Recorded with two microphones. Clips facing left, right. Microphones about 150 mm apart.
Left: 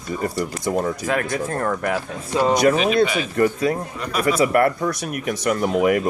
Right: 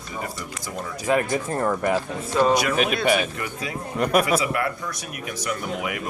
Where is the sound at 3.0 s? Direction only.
55° right (ahead or behind).